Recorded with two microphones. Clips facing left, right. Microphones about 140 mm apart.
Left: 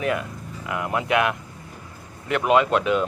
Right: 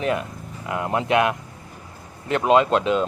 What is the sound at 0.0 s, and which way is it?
Speech, 25° right (ahead or behind).